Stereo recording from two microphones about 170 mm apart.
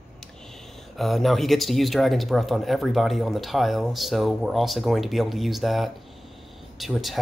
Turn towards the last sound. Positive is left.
turn(degrees=0)  # may be behind; listen again after turning